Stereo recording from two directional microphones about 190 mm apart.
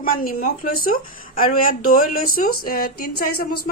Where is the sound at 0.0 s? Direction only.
50° left (ahead or behind).